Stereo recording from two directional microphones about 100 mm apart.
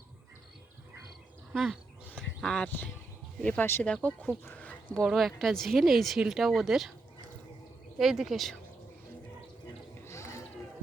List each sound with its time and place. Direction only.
2.4 s speech: 5° left (ahead or behind)
2.6 s speech: 15° left (ahead or behind)
4.4 s a sound: 15° left (ahead or behind)
5.0 s speech: centre (ahead or behind)
7.9 s speech: 5° right (ahead or behind)
10.0 s a sound: 30° left (ahead or behind)